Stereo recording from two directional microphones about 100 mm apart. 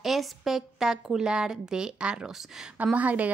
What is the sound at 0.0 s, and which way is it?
A woman's voice, centre (ahead or behind).